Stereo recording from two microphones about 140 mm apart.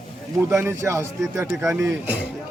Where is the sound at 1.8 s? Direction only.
15° right (ahead or behind).